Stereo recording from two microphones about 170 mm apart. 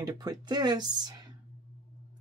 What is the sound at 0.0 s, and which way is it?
Speech, 25° right (ahead or behind).